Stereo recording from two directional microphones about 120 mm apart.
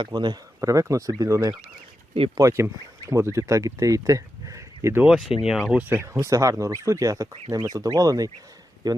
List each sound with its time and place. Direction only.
0.0 s speech: 40° right (ahead or behind); by 5.0 s 20° right (ahead or behind)
5.0 s speech: 5° right (ahead or behind)
5.9 s speech: 25° right (ahead or behind)